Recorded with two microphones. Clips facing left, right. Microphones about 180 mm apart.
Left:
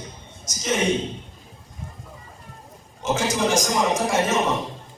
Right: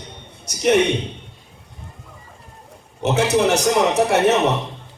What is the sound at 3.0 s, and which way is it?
A man's voice, 65° right (ahead or behind).